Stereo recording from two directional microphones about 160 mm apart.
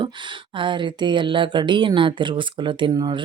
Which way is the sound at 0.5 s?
30° right (ahead or behind).